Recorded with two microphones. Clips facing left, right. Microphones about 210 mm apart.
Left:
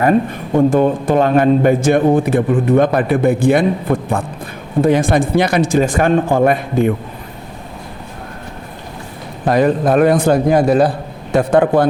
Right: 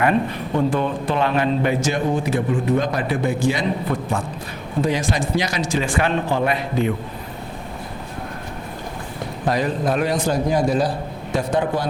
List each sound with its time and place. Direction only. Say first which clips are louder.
0.0 s a man's voice: left 5 dB; 45° left (ahead or behind)
9.5 s a man's voice: left 8 dB; 55° left (ahead or behind)